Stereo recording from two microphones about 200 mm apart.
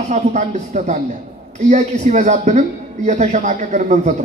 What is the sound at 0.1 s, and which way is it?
A man's voice, 35° right (ahead or behind).